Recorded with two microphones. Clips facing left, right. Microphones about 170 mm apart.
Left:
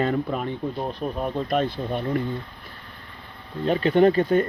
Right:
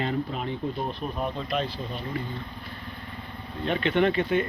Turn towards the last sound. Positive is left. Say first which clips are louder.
# left 5 dB
turn(degrees=40)  # may be behind; listen again after turning